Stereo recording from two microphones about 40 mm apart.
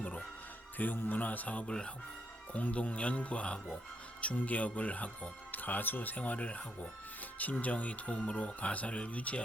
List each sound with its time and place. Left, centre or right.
0.8 s speech: left
1.6 s speech: left
2.5 s speech: left